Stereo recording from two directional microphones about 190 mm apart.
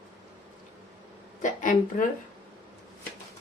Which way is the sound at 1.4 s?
40° left (ahead or behind).